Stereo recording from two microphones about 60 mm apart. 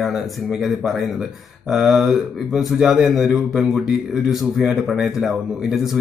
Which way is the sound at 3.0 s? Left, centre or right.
Centre.